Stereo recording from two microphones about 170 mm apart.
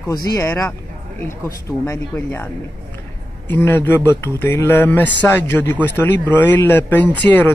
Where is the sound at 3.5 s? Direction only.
15° left (ahead or behind).